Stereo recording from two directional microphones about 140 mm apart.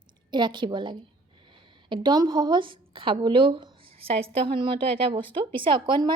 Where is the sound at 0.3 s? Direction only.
35° right (ahead or behind).